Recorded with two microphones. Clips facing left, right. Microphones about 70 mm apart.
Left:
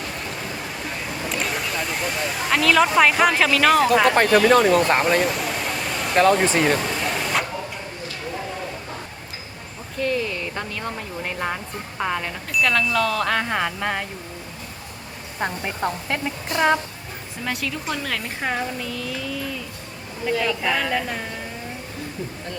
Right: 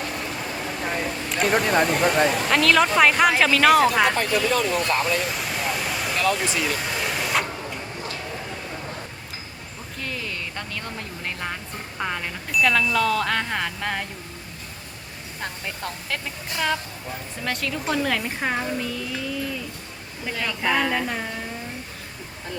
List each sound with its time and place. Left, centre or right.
1.4 s vehicle: right
2.0 s a sound: right
2.3 s speech: centre
4.1 s speech: left
5.3 s a sound: centre
6.1 s speech: left
6.8 s a sound: centre
10.0 s speech: centre
15.6 s speech: left
17.4 s speech: centre